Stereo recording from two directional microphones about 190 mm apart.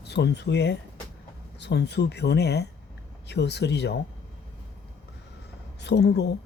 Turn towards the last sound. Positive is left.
turn(degrees=60)  # may be behind; listen again after turning